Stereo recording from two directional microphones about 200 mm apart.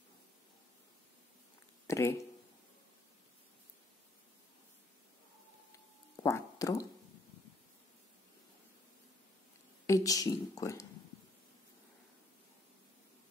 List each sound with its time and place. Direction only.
1.9 s speech: 15° left (ahead or behind)
6.2 s a sound: 15° left (ahead or behind)
9.8 s speech: 15° left (ahead or behind)